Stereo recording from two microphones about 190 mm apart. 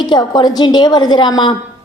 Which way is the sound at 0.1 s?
20° left (ahead or behind).